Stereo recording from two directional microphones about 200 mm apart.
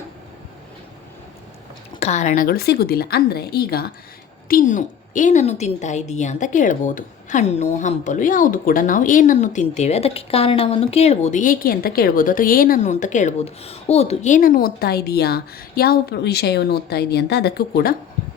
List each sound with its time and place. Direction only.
2.0 s a woman's voice: 35° left (ahead or behind); by 17.9 s 50° left (ahead or behind)